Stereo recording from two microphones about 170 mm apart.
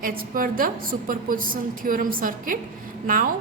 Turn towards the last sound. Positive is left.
turn(degrees=-55)  # may be behind; listen again after turning